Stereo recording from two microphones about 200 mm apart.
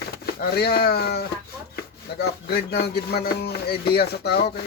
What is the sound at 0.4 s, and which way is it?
Speech, 50° left (ahead or behind).